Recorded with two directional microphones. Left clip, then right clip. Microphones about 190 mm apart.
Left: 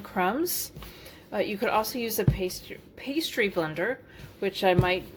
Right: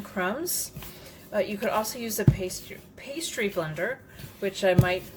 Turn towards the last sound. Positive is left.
turn(degrees=40)  # may be behind; listen again after turning